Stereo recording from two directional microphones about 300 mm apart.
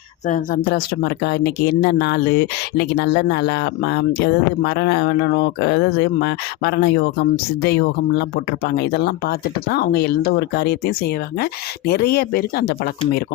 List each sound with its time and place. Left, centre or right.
0.3 s speech: left